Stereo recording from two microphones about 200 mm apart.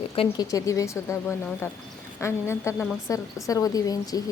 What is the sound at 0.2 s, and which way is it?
A woman's voice, 20° left (ahead or behind).